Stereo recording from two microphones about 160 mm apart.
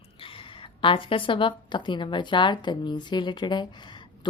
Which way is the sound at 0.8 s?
35° left (ahead or behind).